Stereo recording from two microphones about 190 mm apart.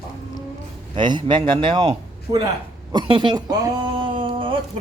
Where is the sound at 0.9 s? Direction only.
25° right (ahead or behind).